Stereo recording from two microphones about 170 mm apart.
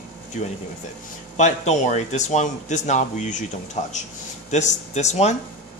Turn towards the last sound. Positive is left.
turn(degrees=40)  # may be behind; listen again after turning